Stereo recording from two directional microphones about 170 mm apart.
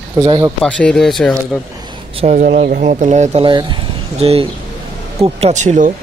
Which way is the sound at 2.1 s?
40° right (ahead or behind).